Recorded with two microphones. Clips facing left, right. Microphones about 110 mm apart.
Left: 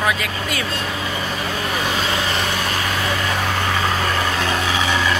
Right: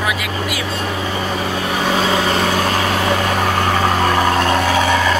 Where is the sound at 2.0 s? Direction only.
45° right (ahead or behind).